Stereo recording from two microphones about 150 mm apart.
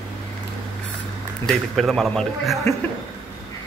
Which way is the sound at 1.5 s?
Centre (ahead or behind).